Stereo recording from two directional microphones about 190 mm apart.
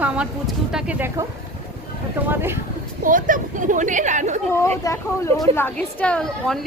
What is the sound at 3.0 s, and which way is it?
A woman's voice, 45° right (ahead or behind).